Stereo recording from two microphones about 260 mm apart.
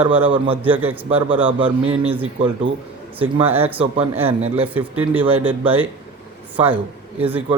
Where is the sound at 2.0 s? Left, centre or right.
Centre.